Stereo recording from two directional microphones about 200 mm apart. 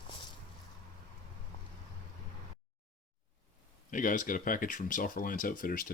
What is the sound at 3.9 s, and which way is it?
Speech, 40° left (ahead or behind).